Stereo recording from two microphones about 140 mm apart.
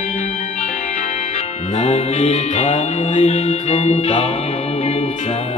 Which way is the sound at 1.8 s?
50° left (ahead or behind).